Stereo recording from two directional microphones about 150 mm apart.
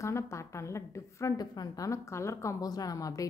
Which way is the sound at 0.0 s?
20° left (ahead or behind).